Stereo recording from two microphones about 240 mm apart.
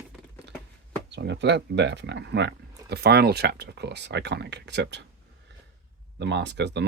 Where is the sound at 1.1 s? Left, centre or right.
Right.